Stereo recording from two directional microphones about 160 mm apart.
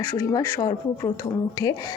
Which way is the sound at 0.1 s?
20° left (ahead or behind).